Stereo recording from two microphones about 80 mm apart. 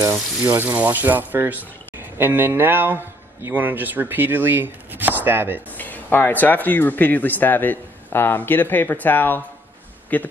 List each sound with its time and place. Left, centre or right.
0.0 s speech: right
5.8 s speech: left